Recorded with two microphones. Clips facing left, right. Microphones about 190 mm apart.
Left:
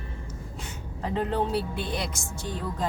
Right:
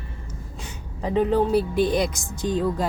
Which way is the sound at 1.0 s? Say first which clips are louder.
Right 7 dB; 15° right (ahead or behind).